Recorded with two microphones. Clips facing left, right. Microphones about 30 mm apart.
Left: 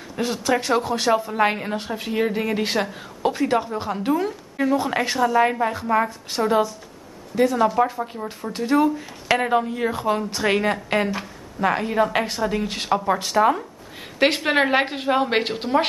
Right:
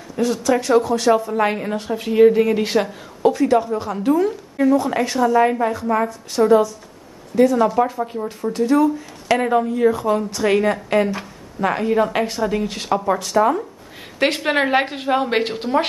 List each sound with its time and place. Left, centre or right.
0.2 s a woman's voice: left
1.9 s speech: centre
3.2 s a woman's voice: left
4.1 s a woman's voice: centre; by 6.5 s left
7.3 s speech: centre
8.5 s a woman's voice: left
9.3 s a woman's voice: centre
11.1 s speech: centre
12.6 s speech: centre
13.2 s a woman's voice: left
14.2 s speech: centre